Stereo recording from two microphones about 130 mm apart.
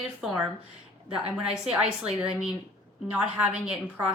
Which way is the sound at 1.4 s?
5° right (ahead or behind).